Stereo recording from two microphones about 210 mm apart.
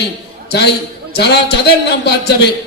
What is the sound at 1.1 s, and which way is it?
Speech, 50° left (ahead or behind).